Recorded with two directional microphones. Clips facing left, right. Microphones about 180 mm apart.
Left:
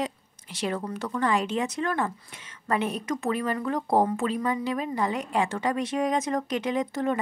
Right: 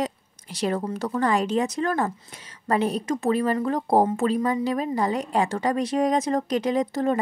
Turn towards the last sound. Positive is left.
turn(degrees=-35)  # may be behind; listen again after turning